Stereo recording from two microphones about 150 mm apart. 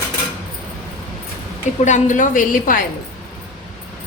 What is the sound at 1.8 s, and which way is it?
Speech, 55° left (ahead or behind).